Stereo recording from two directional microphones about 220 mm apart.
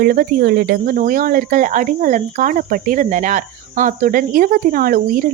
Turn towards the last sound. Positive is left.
turn(degrees=-40)  # may be behind; listen again after turning